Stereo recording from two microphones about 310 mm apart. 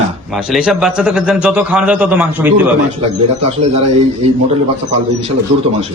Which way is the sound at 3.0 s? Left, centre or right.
Centre.